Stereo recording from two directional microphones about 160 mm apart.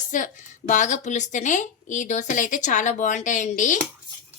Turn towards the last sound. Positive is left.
turn(degrees=50)  # may be behind; listen again after turning